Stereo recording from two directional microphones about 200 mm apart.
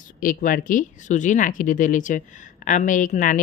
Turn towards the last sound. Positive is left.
turn(degrees=40)  # may be behind; listen again after turning